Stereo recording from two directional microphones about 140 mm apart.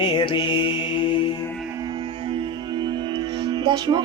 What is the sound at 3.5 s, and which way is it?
Speech, 30° right (ahead or behind).